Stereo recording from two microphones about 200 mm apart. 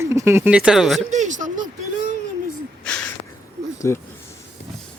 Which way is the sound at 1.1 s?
35° right (ahead or behind).